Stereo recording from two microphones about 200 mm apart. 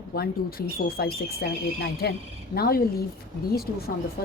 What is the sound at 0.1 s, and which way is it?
A woman's voice, 50° left (ahead or behind).